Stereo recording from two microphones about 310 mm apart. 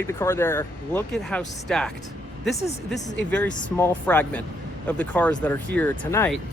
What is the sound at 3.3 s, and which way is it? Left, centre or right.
Speech, centre.